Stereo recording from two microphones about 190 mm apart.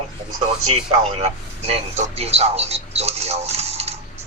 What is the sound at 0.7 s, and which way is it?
A man's voice, 35° right (ahead or behind).